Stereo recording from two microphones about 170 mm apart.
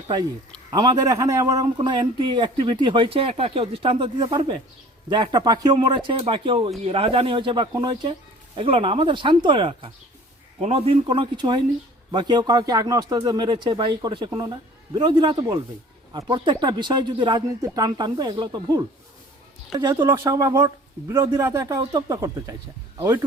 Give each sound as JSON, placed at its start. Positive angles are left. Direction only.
{"t": 0.7, "sound": "a man's voice", "side_deg": -25}